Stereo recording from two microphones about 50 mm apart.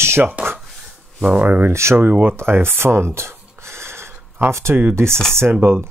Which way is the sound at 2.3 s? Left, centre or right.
Right.